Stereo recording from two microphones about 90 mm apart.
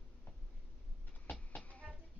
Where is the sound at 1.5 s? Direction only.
15° left (ahead or behind).